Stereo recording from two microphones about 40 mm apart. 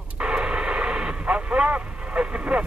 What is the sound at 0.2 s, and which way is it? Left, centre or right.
Radio, right.